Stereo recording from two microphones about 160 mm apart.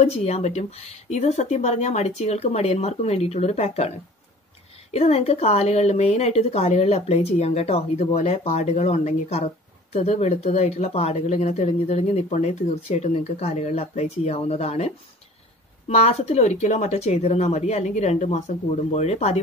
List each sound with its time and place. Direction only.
0.0 s speech: 40° left (ahead or behind)
4.9 s speech: 40° left (ahead or behind)
15.9 s speech: 40° left (ahead or behind)